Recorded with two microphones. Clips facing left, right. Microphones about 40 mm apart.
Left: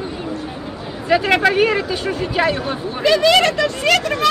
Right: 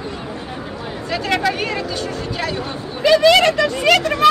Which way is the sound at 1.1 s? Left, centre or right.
Left.